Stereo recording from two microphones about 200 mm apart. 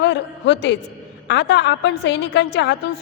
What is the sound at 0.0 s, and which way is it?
A man's voice, 60° left (ahead or behind).